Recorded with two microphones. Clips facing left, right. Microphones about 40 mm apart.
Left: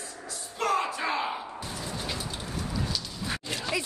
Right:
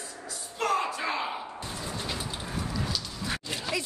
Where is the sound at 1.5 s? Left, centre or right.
Centre.